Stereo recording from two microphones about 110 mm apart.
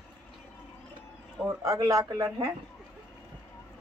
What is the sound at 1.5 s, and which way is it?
A man's voice, 30° right (ahead or behind).